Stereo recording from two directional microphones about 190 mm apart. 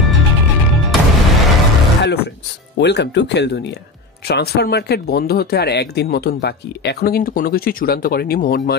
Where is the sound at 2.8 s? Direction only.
65° left (ahead or behind).